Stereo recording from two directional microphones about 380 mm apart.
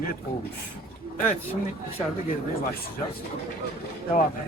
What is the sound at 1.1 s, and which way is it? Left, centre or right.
Speech, centre.